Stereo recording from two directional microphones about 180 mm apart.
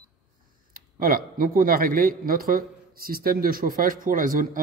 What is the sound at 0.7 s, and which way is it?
A man's voice, 50° right (ahead or behind).